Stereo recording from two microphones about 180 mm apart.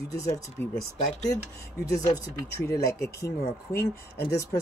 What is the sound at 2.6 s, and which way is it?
Speech, 15° left (ahead or behind).